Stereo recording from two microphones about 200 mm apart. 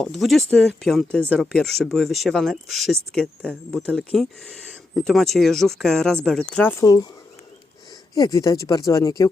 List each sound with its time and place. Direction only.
0.0 s speech: centre (ahead or behind)
8.1 s speech: 15° left (ahead or behind)